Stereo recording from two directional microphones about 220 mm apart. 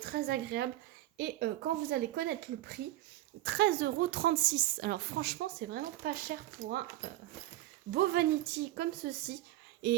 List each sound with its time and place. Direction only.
0.0 s a woman's voice: 45° right (ahead or behind)
7.9 s a woman's voice: 45° right (ahead or behind)